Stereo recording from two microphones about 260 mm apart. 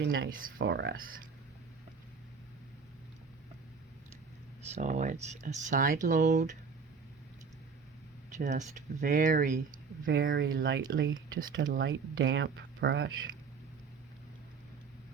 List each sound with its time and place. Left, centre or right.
0.0 s speech: right
4.7 s speech: right
8.4 s speech: right